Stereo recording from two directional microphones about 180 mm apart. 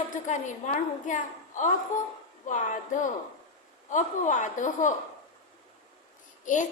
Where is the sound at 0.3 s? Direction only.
45° left (ahead or behind).